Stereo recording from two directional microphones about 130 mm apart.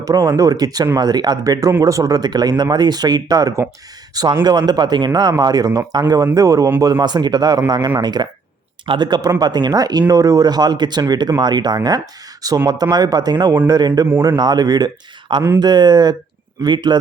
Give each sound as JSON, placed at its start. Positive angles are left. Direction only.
{"t": 0.0, "sound": "speech", "side_deg": -30}
{"t": 7.0, "sound": "speech", "side_deg": -35}